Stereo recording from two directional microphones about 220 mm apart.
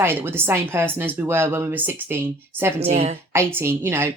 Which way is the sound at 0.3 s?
10° right (ahead or behind).